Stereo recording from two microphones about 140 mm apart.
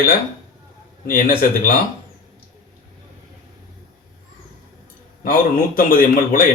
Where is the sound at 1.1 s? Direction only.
75° left (ahead or behind).